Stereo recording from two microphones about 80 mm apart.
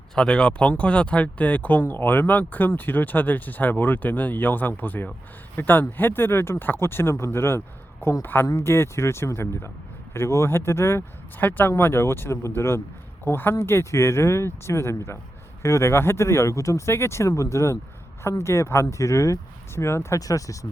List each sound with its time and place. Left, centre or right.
0.1 s speech: centre; by 20.1 s left
20.1 s speech: left